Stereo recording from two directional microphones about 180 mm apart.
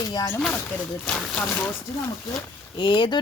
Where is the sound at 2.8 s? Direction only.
25° left (ahead or behind).